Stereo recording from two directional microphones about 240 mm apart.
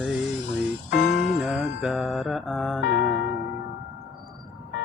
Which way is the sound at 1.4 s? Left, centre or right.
Centre.